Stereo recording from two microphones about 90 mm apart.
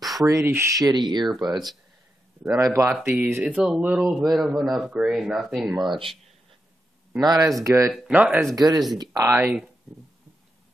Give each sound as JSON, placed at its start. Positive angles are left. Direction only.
{"t": 0.2, "sound": "speech", "side_deg": -35}
{"t": 2.5, "sound": "speech", "side_deg": -35}
{"t": 3.1, "sound": "speech", "side_deg": -20}
{"t": 3.5, "sound": "speech", "side_deg": -5}
{"t": 5.8, "sound": "speech", "side_deg": -60}
{"t": 7.2, "sound": "speech", "side_deg": -40}
{"t": 8.1, "sound": "speech", "side_deg": -15}
{"t": 8.5, "sound": "speech", "side_deg": -45}